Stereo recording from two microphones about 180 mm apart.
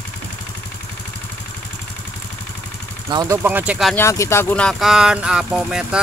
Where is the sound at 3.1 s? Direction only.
20° right (ahead or behind).